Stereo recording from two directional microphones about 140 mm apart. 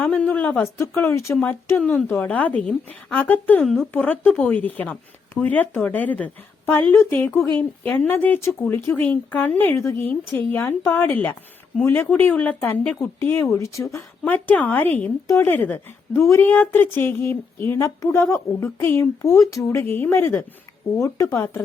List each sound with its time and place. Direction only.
0.0 s speech: 10° left (ahead or behind)
1.8 s a woman's voice: 5° left (ahead or behind)
3.6 s a woman's voice: centre (ahead or behind)
3.9 s speech: 15° left (ahead or behind)